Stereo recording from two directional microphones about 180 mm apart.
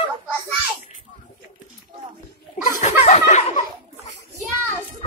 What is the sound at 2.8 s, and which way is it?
Chuckle, 40° left (ahead or behind).